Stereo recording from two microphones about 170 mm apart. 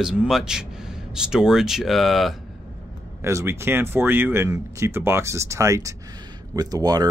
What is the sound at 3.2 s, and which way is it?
Speech, 15° right (ahead or behind).